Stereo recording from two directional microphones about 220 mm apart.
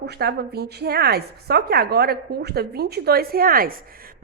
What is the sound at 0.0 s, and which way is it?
A woman's voice, 45° right (ahead or behind).